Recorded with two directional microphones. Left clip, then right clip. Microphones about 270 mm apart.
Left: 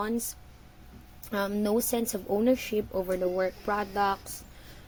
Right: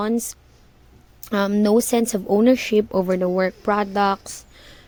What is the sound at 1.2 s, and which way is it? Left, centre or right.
A woman's voice, right.